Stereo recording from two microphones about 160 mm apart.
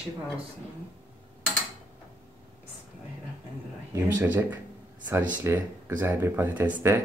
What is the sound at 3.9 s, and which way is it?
Speech, 15° right (ahead or behind).